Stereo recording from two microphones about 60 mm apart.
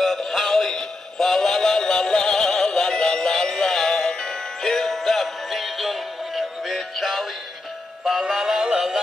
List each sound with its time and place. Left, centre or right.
0.0 s synthetic singing: centre